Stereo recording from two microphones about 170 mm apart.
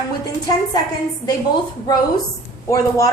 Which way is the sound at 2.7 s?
20° left (ahead or behind).